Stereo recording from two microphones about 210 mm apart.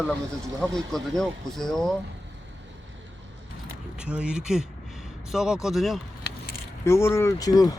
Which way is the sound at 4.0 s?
5° right (ahead or behind).